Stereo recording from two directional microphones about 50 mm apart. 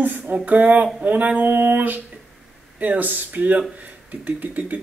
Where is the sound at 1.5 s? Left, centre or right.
Right.